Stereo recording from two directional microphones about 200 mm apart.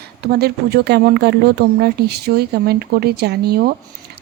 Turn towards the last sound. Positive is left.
turn(degrees=-50)  # may be behind; listen again after turning